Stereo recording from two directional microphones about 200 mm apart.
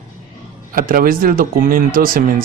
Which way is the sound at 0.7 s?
45° right (ahead or behind).